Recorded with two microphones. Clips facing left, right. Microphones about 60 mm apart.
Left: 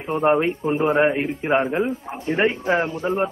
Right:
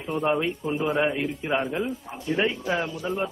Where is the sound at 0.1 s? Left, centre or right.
Left.